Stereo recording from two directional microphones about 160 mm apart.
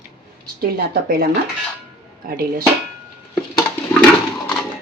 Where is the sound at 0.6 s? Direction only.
70° right (ahead or behind).